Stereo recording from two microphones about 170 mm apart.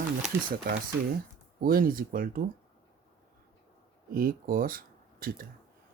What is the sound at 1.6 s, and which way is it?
Speech, 60° right (ahead or behind).